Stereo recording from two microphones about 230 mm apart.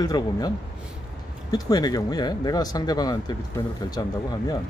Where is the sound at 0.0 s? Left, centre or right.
Centre.